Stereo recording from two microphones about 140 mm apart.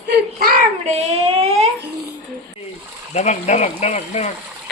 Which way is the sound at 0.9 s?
45° right (ahead or behind).